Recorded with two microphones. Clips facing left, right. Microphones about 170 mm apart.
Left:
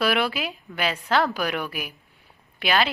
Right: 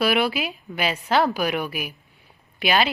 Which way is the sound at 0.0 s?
10° right (ahead or behind).